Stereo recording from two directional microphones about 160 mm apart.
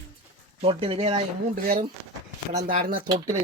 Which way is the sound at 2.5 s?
50° right (ahead or behind).